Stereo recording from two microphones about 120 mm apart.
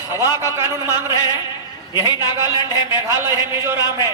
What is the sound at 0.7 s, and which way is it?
Speech, 25° right (ahead or behind).